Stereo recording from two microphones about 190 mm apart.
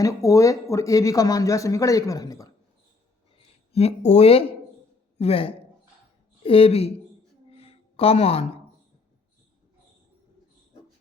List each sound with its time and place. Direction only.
0.0 s speech: 15° left (ahead or behind)
3.7 s speech: 30° left (ahead or behind)
7.5 s a sound: 30° left (ahead or behind)